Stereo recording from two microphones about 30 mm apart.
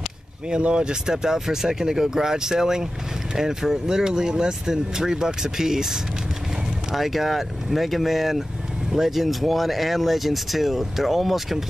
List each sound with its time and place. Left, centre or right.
0.6 s speech: right; by 11.6 s centre